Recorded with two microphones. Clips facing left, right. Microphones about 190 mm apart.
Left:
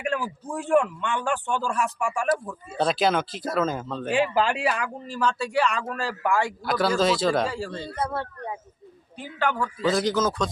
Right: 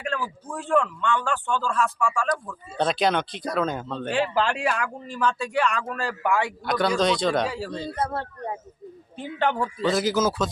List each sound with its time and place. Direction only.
0.0 s a man's voice: 15° left (ahead or behind)
2.7 s speech: centre (ahead or behind)
8.1 s speech: 40° right (ahead or behind)
9.1 s speech: 25° right (ahead or behind)
9.8 s speech: centre (ahead or behind)